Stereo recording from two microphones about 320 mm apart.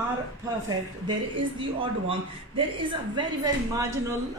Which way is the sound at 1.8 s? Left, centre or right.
Centre.